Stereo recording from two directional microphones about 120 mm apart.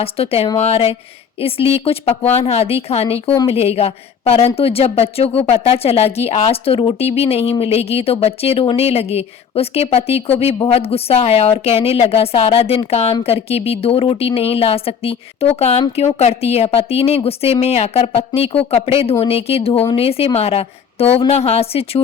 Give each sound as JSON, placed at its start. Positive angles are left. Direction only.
{"t": 0.0, "sound": "a woman's voice", "side_deg": 55}